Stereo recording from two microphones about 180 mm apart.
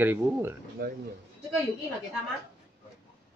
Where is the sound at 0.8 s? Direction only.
60° right (ahead or behind).